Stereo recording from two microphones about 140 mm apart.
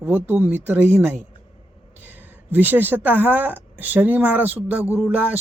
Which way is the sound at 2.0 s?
15° right (ahead or behind).